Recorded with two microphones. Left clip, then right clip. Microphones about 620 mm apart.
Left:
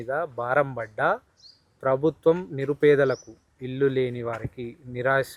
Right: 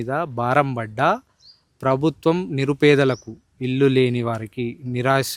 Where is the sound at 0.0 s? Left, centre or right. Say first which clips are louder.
Right 5 dB; right.